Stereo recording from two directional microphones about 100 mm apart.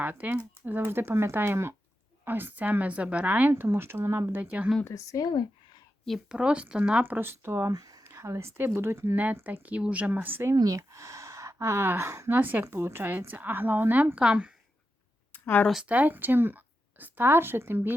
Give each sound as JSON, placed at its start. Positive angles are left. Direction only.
{"t": 0.0, "sound": "speech", "side_deg": -20}
{"t": 4.9, "sound": "speech", "side_deg": 35}
{"t": 6.1, "sound": "speech", "side_deg": -5}
{"t": 7.7, "sound": "speech", "side_deg": -35}
{"t": 10.5, "sound": "speech", "side_deg": -35}
{"t": 15.3, "sound": "a sound", "side_deg": 20}
{"t": 15.7, "sound": "speech", "side_deg": -10}